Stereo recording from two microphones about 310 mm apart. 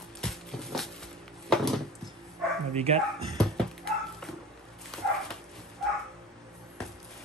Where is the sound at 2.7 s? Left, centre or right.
Centre.